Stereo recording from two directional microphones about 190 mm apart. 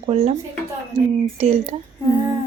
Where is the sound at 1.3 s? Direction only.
35° right (ahead or behind).